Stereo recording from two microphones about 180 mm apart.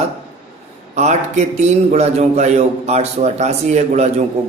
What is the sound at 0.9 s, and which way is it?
A man's voice, 40° right (ahead or behind).